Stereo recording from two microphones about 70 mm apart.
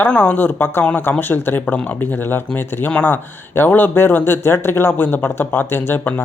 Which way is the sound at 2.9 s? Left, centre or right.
Left.